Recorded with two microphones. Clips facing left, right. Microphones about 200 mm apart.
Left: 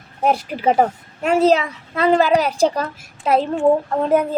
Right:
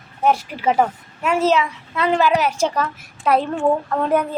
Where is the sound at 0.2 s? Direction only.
35° left (ahead or behind).